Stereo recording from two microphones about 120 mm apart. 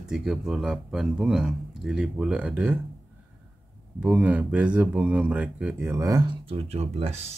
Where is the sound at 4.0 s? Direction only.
10° right (ahead or behind).